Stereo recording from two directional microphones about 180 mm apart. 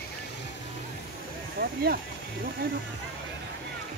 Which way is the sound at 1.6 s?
60° right (ahead or behind).